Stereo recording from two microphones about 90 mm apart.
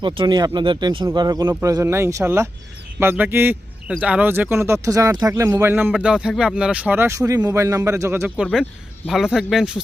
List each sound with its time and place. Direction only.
0.0 s speech: 65° right (ahead or behind)
0.3 s speech: 45° right (ahead or behind)
0.6 s speech: 60° right (ahead or behind)
1.6 s a man's voice: 35° right (ahead or behind)
3.8 s a man's voice: 15° right (ahead or behind); by 5.7 s 30° right (ahead or behind)
5.7 s speech: 15° right (ahead or behind)
7.5 s a man's voice: 35° right (ahead or behind)
9.0 s speech: 5° right (ahead or behind)